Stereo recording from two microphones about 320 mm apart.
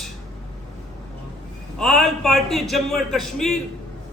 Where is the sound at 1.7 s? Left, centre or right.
Centre.